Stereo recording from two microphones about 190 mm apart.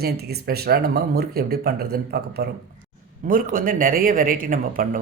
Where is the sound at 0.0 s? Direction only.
55° right (ahead or behind).